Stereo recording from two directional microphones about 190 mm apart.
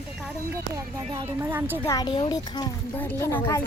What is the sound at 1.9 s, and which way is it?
A woman's voice, 25° left (ahead or behind).